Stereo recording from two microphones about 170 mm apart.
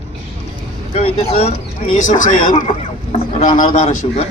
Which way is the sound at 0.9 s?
35° left (ahead or behind).